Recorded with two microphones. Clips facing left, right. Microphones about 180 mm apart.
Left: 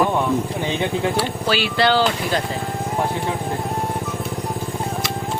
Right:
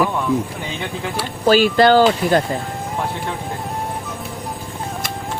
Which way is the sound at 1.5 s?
45° right (ahead or behind).